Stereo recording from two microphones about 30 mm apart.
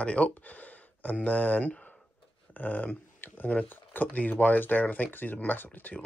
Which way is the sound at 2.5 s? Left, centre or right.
Left.